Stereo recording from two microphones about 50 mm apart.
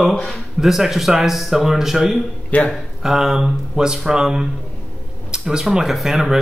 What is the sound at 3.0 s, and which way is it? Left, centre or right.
Speech, centre.